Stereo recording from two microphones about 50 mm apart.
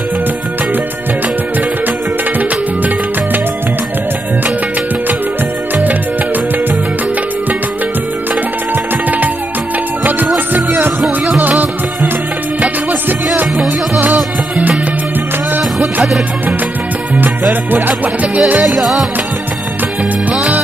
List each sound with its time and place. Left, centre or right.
17.1 s music: right
18.6 s music: centre